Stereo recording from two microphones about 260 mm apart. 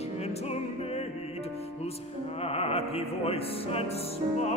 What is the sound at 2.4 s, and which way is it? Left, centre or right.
Music, left.